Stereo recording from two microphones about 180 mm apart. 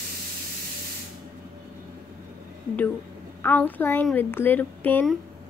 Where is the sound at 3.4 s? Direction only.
10° left (ahead or behind).